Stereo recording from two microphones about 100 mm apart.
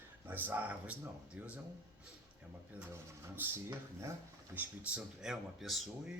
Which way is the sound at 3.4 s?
20° right (ahead or behind).